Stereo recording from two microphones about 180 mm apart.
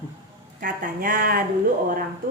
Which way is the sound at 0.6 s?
50° right (ahead or behind).